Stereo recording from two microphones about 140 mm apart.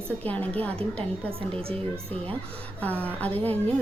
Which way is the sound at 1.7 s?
45° right (ahead or behind).